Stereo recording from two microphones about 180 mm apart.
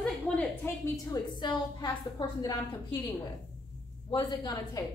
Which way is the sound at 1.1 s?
25° left (ahead or behind).